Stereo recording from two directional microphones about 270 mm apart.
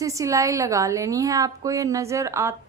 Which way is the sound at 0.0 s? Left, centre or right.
Centre.